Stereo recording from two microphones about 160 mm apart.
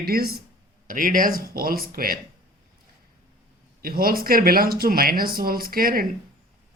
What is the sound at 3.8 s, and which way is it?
Speech, 65° right (ahead or behind).